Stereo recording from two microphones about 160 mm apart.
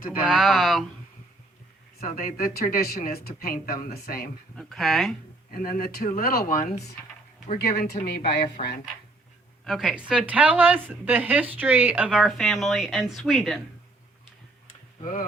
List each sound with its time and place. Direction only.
0.2 s speech: centre (ahead or behind)
2.0 s speech: 60° left (ahead or behind)
4.5 s speech: centre (ahead or behind)
5.5 s speech: 65° left (ahead or behind); by 8.4 s 90° left
9.6 s speech: centre (ahead or behind)
15.0 s speech: 55° left (ahead or behind)